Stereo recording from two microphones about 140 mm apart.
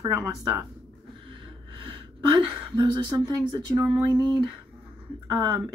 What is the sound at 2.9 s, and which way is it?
Speech, 30° right (ahead or behind).